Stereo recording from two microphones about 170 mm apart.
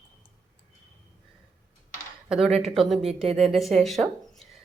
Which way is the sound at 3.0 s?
35° right (ahead or behind).